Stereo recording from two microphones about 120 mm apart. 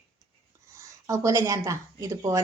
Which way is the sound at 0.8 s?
25° right (ahead or behind).